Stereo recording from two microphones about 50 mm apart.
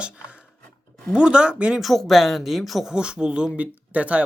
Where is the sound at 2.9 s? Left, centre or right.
Centre.